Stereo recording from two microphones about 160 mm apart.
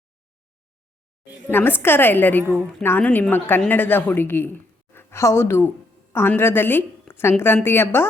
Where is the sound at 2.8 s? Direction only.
10° left (ahead or behind).